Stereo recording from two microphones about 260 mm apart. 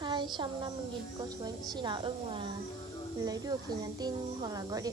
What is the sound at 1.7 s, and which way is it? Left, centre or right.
A woman's voice, centre.